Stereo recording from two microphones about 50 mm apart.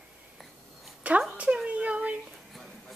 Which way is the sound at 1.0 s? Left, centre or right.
Right.